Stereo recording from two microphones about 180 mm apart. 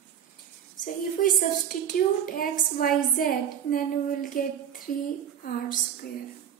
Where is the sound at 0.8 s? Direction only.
50° left (ahead or behind).